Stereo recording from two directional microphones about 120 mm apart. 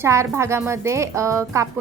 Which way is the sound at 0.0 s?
25° right (ahead or behind).